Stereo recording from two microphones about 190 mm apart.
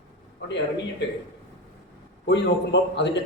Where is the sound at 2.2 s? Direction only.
65° left (ahead or behind).